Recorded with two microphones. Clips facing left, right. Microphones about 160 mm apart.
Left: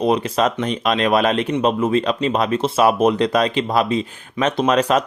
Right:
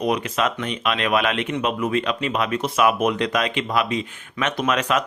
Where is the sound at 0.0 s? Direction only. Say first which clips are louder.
Left 4 dB; 30° left (ahead or behind).